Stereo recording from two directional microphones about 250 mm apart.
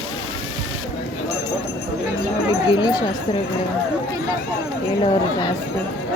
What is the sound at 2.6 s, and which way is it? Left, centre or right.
Speech, centre.